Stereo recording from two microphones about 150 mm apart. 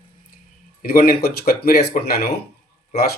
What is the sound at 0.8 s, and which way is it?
Speech, 70° left (ahead or behind).